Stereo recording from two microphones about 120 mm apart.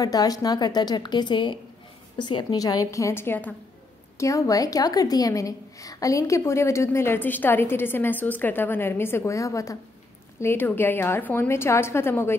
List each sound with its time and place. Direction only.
0.0 s a woman's voice: 30° left (ahead or behind); by 3.5 s 15° left (ahead or behind)
4.2 s a woman's voice: 25° left (ahead or behind)